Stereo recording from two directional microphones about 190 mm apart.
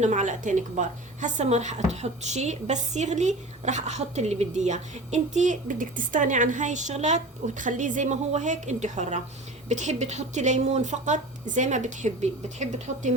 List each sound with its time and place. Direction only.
0.0 s a woman's voice: 40° right (ahead or behind)